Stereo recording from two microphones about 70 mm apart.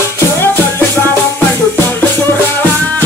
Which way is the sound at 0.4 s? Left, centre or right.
Left.